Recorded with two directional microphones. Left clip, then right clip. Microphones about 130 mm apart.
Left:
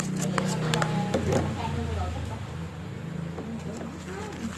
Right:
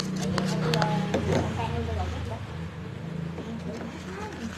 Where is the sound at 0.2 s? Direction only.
10° left (ahead or behind).